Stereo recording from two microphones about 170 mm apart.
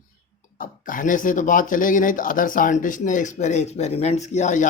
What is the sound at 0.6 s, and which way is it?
Speech, 50° left (ahead or behind).